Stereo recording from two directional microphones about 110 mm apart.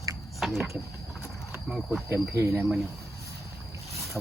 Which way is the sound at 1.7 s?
Centre (ahead or behind).